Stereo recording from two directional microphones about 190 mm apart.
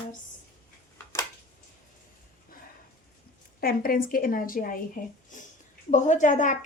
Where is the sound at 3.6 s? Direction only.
50° left (ahead or behind).